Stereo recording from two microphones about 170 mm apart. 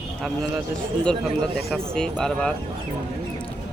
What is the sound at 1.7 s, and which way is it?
Speech, 5° left (ahead or behind).